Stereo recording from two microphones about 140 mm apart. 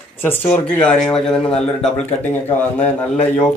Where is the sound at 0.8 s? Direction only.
5° left (ahead or behind).